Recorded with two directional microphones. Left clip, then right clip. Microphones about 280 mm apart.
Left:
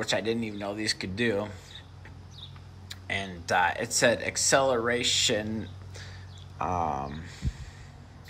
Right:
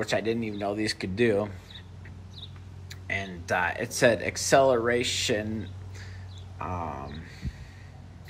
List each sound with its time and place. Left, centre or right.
0.0 s speech: centre
2.9 s speech: centre